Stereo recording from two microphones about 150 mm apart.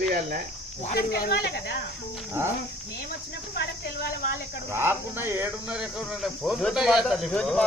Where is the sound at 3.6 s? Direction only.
90° left.